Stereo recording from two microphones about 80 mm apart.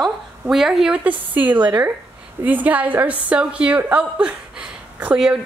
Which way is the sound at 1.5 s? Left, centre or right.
Right.